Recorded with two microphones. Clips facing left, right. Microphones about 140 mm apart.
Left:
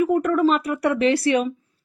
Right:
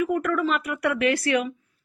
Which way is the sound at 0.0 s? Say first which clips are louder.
Left 5 dB; 30° left (ahead or behind).